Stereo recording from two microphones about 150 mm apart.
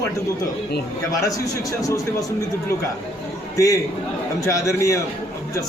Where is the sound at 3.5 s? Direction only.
20° left (ahead or behind).